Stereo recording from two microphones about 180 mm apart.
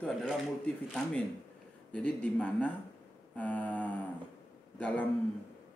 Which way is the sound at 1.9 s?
5° left (ahead or behind).